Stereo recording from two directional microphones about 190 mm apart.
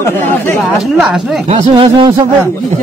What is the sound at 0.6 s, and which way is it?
Speech, centre (ahead or behind).